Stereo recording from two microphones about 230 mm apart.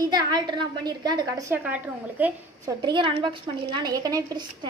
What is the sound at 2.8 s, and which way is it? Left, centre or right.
A woman's voice, right.